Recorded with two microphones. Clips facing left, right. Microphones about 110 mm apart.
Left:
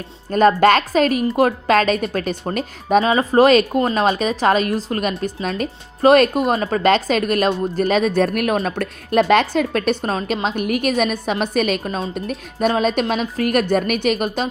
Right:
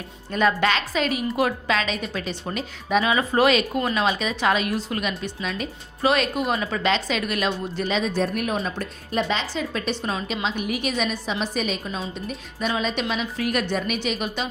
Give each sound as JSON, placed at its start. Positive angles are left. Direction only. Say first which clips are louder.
{"t": 0.3, "sound": "speech", "louder": "left 8 dB", "side_deg": 45}